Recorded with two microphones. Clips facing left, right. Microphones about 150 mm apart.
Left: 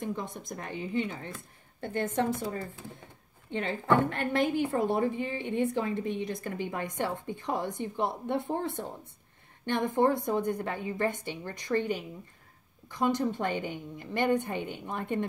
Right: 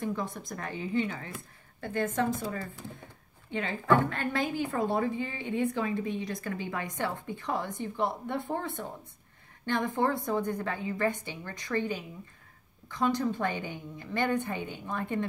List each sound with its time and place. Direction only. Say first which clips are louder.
0.0 s a woman's voice: right 2 dB; 20° left (ahead or behind)
2.5 s a woman's voice: even; 25° left (ahead or behind)